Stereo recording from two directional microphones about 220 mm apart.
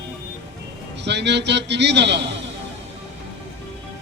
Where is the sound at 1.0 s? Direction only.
50° right (ahead or behind).